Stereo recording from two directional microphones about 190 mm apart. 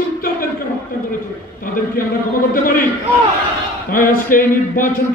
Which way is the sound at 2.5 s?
50° left (ahead or behind).